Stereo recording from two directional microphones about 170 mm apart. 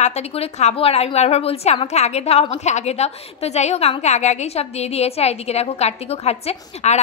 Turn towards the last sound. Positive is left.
turn(degrees=40)  # may be behind; listen again after turning